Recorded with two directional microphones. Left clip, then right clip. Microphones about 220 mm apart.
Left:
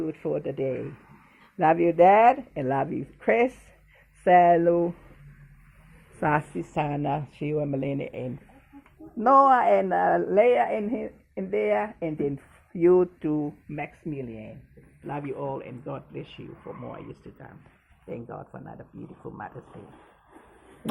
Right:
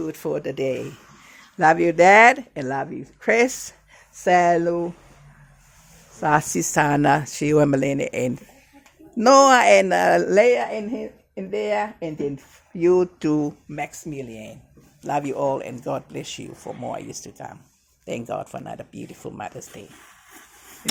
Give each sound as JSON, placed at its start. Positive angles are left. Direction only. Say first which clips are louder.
{"t": 0.0, "sound": "speech", "louder": "right 3 dB", "side_deg": -25}
{"t": 2.6, "sound": "speech", "louder": "left 1 dB", "side_deg": -25}
{"t": 3.2, "sound": "speech", "louder": "right 4 dB", "side_deg": -35}
{"t": 6.3, "sound": "speech", "louder": "right 7 dB", "side_deg": -50}
{"t": 9.1, "sound": "speech", "louder": "right 5 dB", "side_deg": -75}
{"t": 10.5, "sound": "speech", "louder": "right 1 dB", "side_deg": -25}
{"t": 13.1, "sound": "speech", "louder": "right 6 dB", "side_deg": -55}
{"t": 13.7, "sound": "speech", "louder": "right 2 dB", "side_deg": -15}
{"t": 15.0, "sound": "speech", "louder": "right 10 dB", "side_deg": -50}
{"t": 18.1, "sound": "speech", "louder": "right 10 dB", "side_deg": -65}